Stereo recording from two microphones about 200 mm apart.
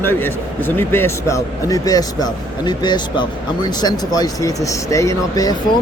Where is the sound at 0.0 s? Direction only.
10° left (ahead or behind).